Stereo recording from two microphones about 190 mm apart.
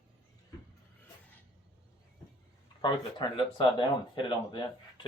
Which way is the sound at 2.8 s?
25° left (ahead or behind).